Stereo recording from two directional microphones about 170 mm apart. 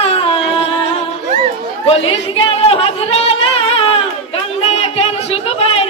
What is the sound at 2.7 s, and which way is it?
Music, 35° left (ahead or behind).